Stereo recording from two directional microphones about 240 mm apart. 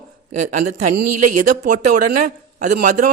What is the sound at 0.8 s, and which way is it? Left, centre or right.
Speech, right.